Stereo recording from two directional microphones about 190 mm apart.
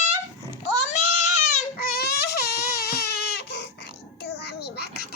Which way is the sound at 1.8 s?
55° left (ahead or behind).